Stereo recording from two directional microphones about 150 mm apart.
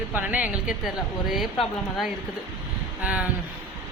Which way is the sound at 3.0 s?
10° right (ahead or behind).